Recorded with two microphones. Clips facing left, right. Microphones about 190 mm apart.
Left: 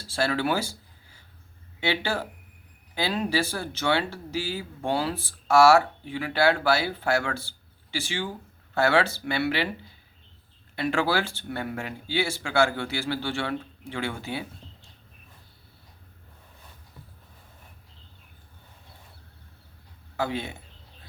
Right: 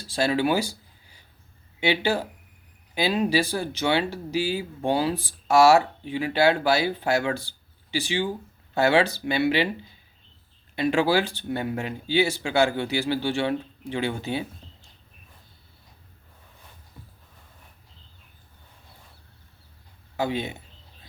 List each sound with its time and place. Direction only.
0.0 s speech: 15° right (ahead or behind)
10.8 s speech: 15° right (ahead or behind)
20.1 s speech: 20° right (ahead or behind)